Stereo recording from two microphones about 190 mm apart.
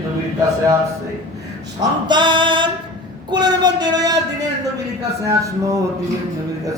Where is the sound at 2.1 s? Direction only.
25° right (ahead or behind).